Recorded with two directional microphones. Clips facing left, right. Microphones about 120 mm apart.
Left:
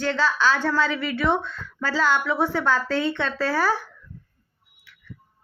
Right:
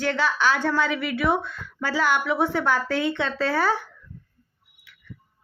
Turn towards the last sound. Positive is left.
turn(degrees=-20)  # may be behind; listen again after turning